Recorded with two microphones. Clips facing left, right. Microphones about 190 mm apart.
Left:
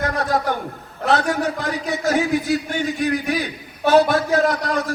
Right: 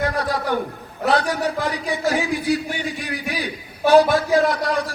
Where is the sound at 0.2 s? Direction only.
45° left (ahead or behind).